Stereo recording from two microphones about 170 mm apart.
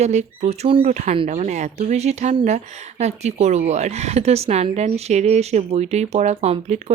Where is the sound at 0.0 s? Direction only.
40° right (ahead or behind).